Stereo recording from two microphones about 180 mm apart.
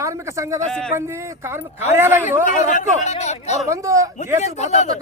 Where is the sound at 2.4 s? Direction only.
45° left (ahead or behind).